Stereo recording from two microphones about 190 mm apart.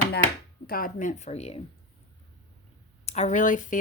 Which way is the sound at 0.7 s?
45° left (ahead or behind).